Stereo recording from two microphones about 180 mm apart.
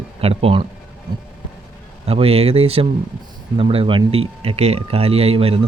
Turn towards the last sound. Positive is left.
turn(degrees=-35)  # may be behind; listen again after turning